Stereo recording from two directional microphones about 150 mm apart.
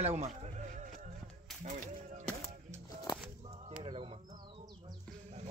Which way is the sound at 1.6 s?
50° right (ahead or behind).